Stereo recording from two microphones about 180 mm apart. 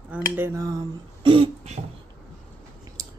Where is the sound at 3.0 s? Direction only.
20° right (ahead or behind).